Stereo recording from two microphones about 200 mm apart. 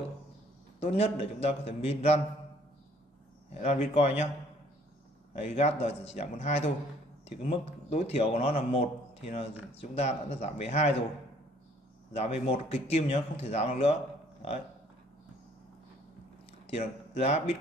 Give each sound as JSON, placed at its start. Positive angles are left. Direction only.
{"t": 0.7, "sound": "a man's voice", "side_deg": 30}
{"t": 3.5, "sound": "a man's voice", "side_deg": 35}
{"t": 5.3, "sound": "a man's voice", "side_deg": 30}
{"t": 12.1, "sound": "a man's voice", "side_deg": 30}
{"t": 16.6, "sound": "a man's voice", "side_deg": 30}